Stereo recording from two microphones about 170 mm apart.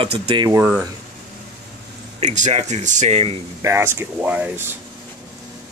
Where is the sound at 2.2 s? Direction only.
45° right (ahead or behind).